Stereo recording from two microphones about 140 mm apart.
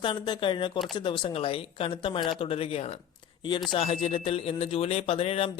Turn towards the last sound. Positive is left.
turn(degrees=45)  # may be behind; listen again after turning